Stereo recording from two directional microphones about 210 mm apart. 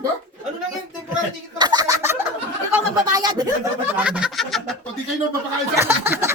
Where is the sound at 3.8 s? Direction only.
5° right (ahead or behind).